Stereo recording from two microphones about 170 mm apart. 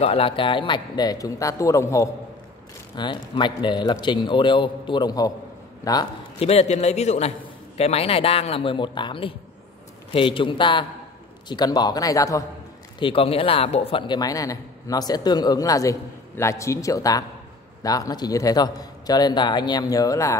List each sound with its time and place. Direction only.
0.0 s a man's voice: 35° left (ahead or behind)
6.4 s a man's voice: 35° left (ahead or behind); by 12.4 s 20° left (ahead or behind)
13.0 s a man's voice: 35° left (ahead or behind)